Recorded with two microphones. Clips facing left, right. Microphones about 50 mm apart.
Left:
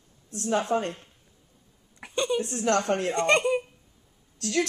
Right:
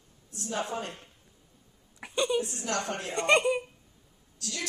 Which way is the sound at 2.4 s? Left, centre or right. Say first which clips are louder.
Left 8 dB; left.